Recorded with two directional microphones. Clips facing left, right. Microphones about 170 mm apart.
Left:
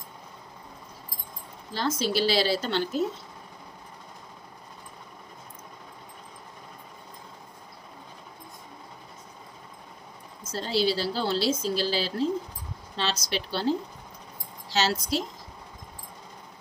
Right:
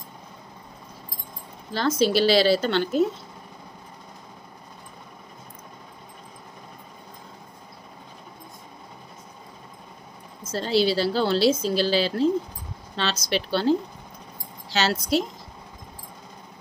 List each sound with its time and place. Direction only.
1.7 s a woman's voice: 70° right (ahead or behind)
10.5 s a woman's voice: 70° right (ahead or behind)
14.7 s a woman's voice: 70° right (ahead or behind)